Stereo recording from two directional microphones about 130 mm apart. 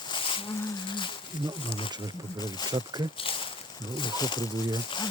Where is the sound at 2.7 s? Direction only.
30° right (ahead or behind).